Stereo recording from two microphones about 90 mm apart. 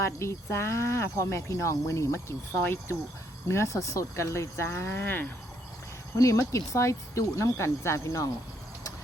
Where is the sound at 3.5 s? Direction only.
35° left (ahead or behind).